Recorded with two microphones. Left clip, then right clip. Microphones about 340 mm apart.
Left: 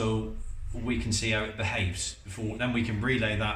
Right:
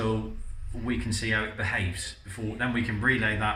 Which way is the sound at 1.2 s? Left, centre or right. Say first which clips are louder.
Right 3 dB; centre.